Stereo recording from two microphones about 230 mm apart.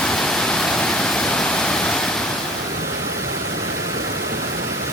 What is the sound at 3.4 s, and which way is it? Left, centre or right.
Pink noise, right.